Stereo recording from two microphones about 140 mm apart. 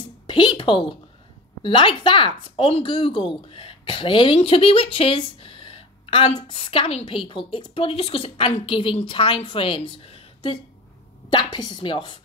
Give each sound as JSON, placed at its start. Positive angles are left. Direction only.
{"t": 0.3, "sound": "a woman's voice", "side_deg": 35}